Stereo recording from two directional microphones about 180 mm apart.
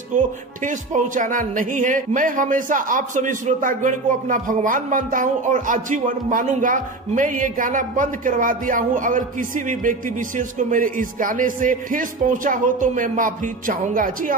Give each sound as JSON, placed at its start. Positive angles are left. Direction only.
{"t": 0.7, "sound": "speech", "side_deg": -45}